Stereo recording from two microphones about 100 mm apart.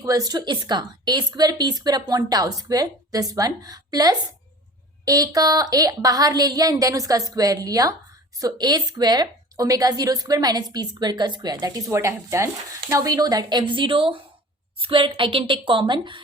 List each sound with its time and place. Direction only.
0.0 s a woman's voice: 35° right (ahead or behind); by 16.2 s 55° right (ahead or behind)